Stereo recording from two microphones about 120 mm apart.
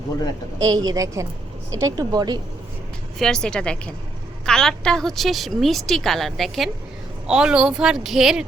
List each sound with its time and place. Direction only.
0.6 s a woman's voice: 35° right (ahead or behind)
3.2 s a woman's voice: 5° left (ahead or behind)